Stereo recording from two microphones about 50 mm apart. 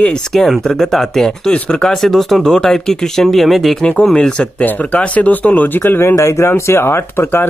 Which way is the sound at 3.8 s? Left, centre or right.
Centre.